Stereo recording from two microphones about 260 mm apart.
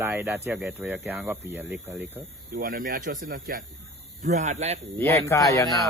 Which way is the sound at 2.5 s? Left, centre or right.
Right.